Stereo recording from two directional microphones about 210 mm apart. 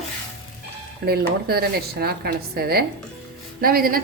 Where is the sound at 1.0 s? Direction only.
45° right (ahead or behind).